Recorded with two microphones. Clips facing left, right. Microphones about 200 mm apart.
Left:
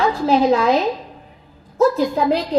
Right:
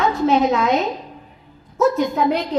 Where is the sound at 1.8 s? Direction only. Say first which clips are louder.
Left 1 dB; 30° left (ahead or behind).